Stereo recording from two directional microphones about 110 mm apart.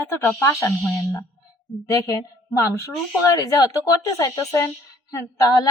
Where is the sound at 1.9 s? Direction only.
30° left (ahead or behind).